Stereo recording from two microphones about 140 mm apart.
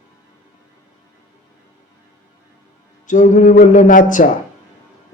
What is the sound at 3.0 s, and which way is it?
A man's voice, 65° left (ahead or behind).